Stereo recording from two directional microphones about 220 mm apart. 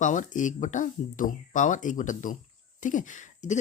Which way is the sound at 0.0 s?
35° left (ahead or behind).